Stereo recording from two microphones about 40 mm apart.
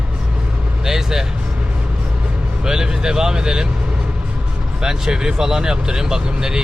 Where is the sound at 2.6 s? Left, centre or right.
Centre.